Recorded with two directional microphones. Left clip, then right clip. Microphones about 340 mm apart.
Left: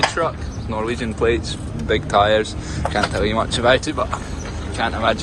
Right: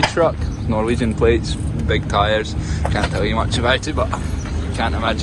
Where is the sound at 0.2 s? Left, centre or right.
Centre.